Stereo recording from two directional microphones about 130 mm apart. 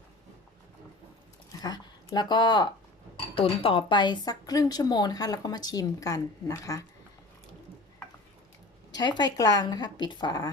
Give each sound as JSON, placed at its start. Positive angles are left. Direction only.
{"t": 1.6, "sound": "a woman's voice", "side_deg": 30}
{"t": 9.0, "sound": "a woman's voice", "side_deg": 35}